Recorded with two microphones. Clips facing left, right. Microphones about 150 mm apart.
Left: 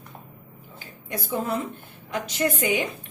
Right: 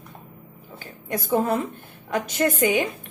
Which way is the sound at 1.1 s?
50° right (ahead or behind).